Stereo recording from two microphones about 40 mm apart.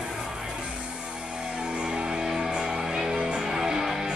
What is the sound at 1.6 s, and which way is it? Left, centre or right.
Music, right.